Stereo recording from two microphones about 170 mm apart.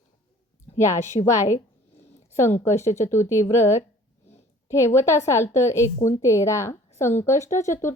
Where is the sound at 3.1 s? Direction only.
15° left (ahead or behind).